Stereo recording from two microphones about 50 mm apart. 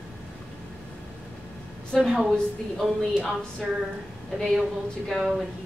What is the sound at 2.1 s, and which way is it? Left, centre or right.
Speech, centre.